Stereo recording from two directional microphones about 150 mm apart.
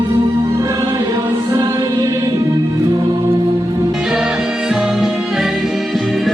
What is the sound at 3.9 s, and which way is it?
Music, 5° right (ahead or behind).